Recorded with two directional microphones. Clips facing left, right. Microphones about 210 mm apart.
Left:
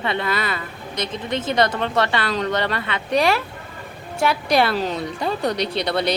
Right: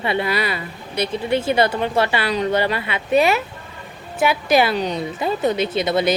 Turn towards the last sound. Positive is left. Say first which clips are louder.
# right 3 dB
turn(degrees=-5)  # may be behind; listen again after turning